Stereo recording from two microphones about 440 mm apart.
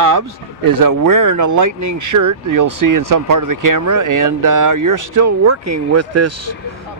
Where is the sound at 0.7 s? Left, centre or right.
Right.